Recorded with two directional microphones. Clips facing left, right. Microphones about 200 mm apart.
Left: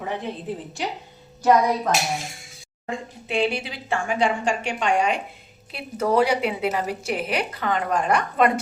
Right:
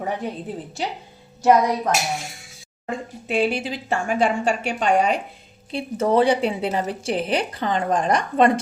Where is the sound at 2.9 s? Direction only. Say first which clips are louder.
Right 2 dB; 45° right (ahead or behind).